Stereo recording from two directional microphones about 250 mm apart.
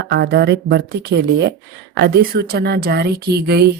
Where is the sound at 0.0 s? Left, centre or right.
Right.